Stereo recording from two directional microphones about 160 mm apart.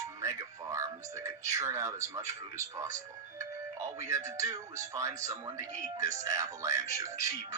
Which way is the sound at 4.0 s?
20° right (ahead or behind).